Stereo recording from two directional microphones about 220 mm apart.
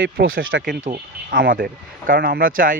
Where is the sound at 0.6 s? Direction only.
40° right (ahead or behind).